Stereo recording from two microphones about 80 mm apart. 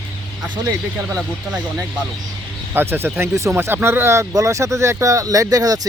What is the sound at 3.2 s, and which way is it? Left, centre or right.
Speech, right.